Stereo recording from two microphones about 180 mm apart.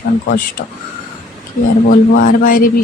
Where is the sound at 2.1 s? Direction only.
50° left (ahead or behind).